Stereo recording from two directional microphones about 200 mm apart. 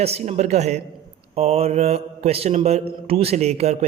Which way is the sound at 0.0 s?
35° right (ahead or behind).